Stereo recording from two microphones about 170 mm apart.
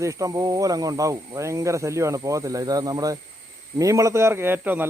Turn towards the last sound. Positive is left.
turn(degrees=-10)  # may be behind; listen again after turning